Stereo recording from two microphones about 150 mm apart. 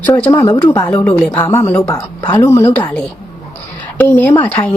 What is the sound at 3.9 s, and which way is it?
Speech, 10° left (ahead or behind).